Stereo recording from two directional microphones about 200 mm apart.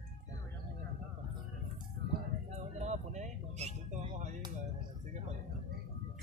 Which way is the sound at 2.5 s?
35° right (ahead or behind).